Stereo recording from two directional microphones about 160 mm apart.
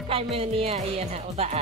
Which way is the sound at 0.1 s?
35° right (ahead or behind).